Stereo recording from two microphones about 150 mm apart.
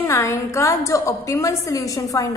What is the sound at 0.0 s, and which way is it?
A woman's voice, 20° left (ahead or behind).